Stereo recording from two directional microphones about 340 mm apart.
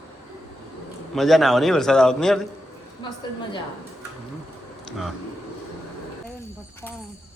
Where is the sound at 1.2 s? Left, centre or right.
Centre.